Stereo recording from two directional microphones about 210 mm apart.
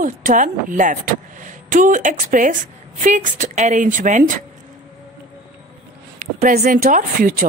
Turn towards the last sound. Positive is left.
turn(degrees=-40)  # may be behind; listen again after turning